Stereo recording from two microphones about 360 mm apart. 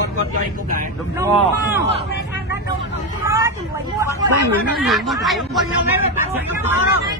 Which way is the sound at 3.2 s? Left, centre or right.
Centre.